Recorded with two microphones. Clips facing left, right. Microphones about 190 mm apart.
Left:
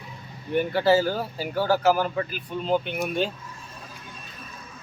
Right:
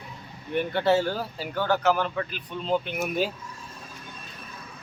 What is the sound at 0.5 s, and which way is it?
Speech, centre (ahead or behind).